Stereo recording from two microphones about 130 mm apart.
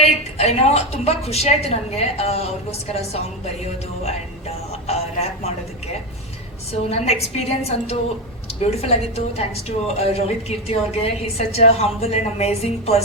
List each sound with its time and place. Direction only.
0.0 s a woman's voice: 55° left (ahead or behind)
6.7 s a woman's voice: 50° left (ahead or behind)